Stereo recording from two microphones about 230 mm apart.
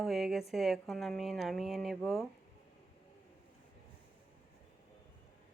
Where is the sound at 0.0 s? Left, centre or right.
Centre.